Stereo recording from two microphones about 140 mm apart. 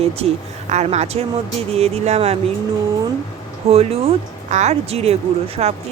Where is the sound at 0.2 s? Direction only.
45° right (ahead or behind).